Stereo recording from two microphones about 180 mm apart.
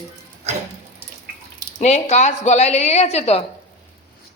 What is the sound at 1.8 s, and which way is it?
A woman's voice, 40° left (ahead or behind).